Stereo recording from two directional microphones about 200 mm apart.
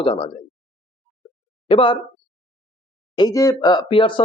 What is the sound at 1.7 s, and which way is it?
Speech, 25° left (ahead or behind).